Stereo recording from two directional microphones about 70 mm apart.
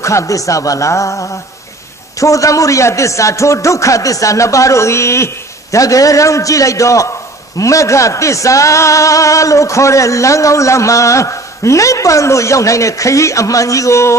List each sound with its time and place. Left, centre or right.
0.0 s a man's voice: left